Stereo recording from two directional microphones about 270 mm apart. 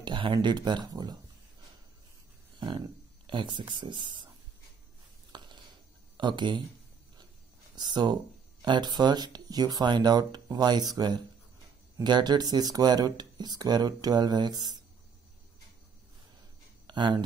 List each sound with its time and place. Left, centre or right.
0.0 s speech: centre
3.3 s speech: centre
5.3 s a sound: centre
6.1 s speech: centre
7.7 s speech: centre
16.8 s a sound: centre